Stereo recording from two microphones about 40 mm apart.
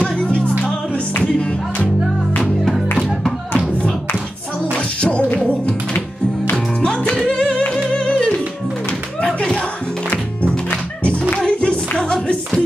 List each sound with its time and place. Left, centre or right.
0.0 s music: left
3.5 s clapping: left
4.7 s music: left
6.5 s music: left
9.2 s a sound: left
10.0 s music: left